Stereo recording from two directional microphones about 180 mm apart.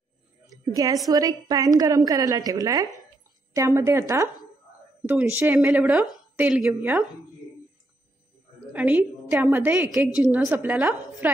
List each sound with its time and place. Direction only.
0.5 s a woman's voice: 20° right (ahead or behind)
8.7 s a woman's voice: 10° right (ahead or behind)